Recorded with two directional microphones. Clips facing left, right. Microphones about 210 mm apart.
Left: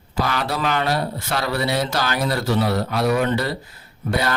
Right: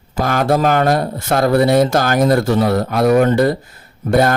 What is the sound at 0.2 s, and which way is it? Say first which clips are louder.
Speech: right 8 dB; 50° right (ahead or behind).